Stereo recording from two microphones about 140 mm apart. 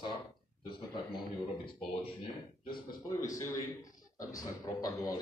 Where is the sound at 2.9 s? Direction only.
65° left (ahead or behind).